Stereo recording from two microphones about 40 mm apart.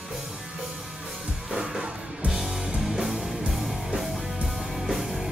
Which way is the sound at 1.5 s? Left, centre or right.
Centre.